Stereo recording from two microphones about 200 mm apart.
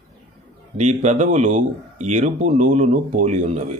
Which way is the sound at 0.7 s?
35° right (ahead or behind).